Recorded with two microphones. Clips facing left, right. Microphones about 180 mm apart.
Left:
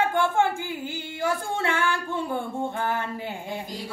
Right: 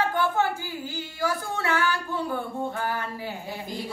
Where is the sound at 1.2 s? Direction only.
25° left (ahead or behind).